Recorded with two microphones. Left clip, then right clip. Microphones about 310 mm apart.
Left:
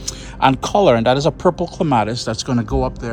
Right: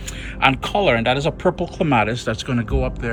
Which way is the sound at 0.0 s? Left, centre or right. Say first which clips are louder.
Left 2 dB; centre.